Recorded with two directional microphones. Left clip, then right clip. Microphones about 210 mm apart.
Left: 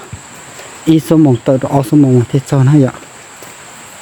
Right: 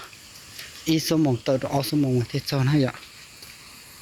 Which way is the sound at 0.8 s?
15° left (ahead or behind).